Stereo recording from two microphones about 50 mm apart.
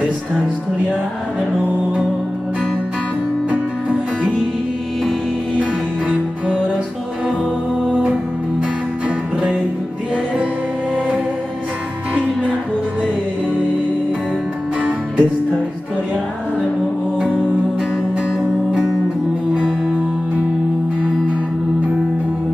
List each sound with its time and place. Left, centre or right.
5.6 s music: right
7.9 s music: right
14.8 s music: right
19.5 s music: right